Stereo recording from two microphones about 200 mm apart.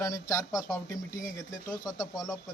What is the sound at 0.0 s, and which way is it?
A man's voice, 15° left (ahead or behind).